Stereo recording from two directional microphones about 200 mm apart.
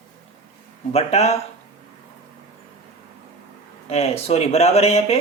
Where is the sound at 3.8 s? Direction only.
30° left (ahead or behind).